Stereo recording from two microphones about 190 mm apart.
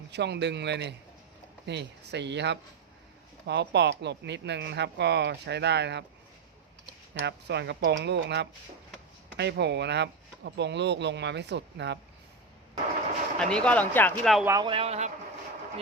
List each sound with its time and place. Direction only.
0.1 s speech: 65° right (ahead or behind)
7.1 s speech: 65° right (ahead or behind)
13.4 s speech: 5° left (ahead or behind)
14.4 s a man's voice: 20° right (ahead or behind)